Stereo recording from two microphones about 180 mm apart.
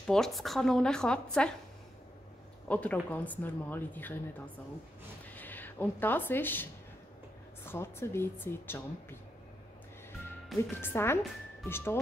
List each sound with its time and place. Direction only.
0.0 s a woman's voice: 5° left (ahead or behind)
2.7 s speech: 10° left (ahead or behind)
5.3 s speech: 10° left (ahead or behind)
10.8 s speech: 15° left (ahead or behind)